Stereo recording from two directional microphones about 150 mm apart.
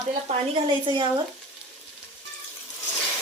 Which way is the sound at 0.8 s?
35° right (ahead or behind).